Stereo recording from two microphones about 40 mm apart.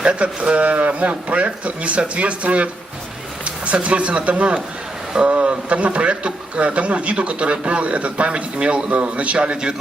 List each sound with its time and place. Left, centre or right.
0.0 s a man's voice: right